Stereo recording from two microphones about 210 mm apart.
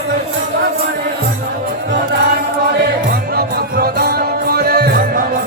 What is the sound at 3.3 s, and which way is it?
Music, 45° right (ahead or behind).